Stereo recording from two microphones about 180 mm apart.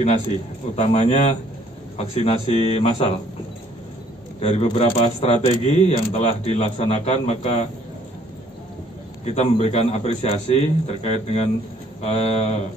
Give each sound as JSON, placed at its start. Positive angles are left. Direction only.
{"t": 0.7, "sound": "speech", "side_deg": 40}
{"t": 4.4, "sound": "speech", "side_deg": 35}
{"t": 9.2, "sound": "speech", "side_deg": 35}